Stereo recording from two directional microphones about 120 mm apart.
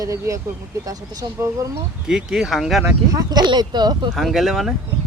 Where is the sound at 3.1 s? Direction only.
35° right (ahead or behind).